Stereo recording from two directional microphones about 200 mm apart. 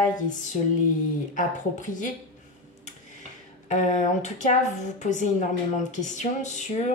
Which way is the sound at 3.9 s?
35° left (ahead or behind).